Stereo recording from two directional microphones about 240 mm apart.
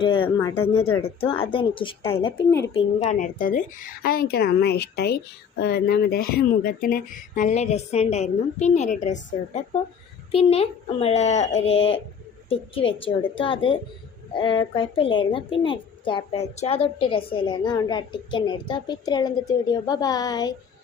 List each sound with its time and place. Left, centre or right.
0.0 s a woman's voice: left
2.7 s a woman's voice: left
10.3 s a woman's voice: left